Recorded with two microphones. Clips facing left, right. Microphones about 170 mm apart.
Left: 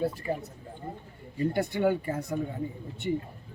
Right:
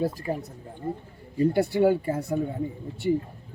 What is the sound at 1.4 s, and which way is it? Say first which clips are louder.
A man's voice: right 6 dB; 35° right (ahead or behind).